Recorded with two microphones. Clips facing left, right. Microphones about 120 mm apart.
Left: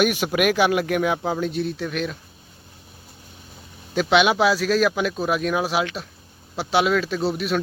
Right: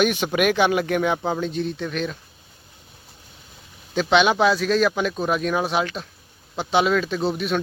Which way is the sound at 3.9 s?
5° left (ahead or behind).